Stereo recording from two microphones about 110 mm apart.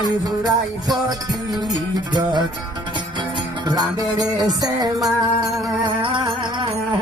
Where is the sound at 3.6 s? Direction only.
35° right (ahead or behind).